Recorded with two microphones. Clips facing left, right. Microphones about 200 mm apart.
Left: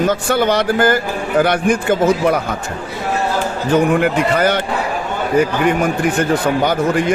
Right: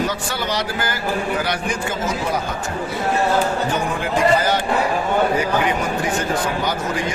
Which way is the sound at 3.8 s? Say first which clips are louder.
Left 4 dB; 65° left (ahead or behind).